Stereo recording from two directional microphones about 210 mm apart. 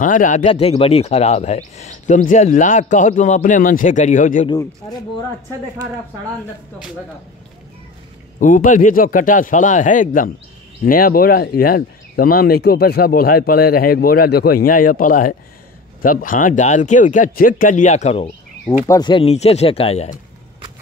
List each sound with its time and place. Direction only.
0.0 s speech: 40° left (ahead or behind)
4.5 s speech: 15° left (ahead or behind)
8.4 s speech: 40° left (ahead or behind)
18.9 s speech: 20° left (ahead or behind)